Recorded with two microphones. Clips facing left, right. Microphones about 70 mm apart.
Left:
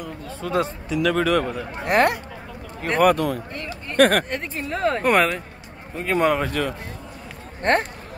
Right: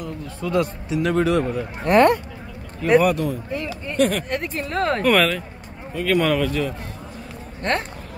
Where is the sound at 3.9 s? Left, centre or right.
Left.